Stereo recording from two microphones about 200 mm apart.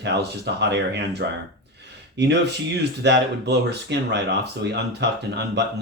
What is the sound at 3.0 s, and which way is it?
Speech, 60° right (ahead or behind).